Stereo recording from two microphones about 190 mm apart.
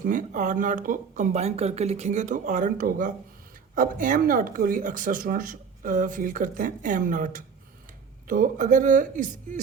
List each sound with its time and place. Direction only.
0.0 s speech: 40° right (ahead or behind)